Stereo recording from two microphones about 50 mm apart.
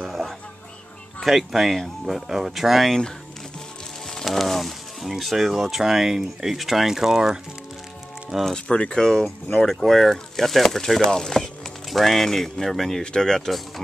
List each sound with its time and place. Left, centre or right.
1.2 s speech: centre
4.1 s speech: centre
8.6 s speech: centre